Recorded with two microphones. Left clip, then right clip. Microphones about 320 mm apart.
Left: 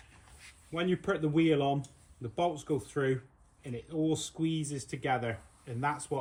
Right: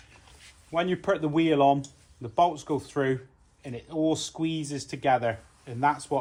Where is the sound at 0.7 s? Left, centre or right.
Right.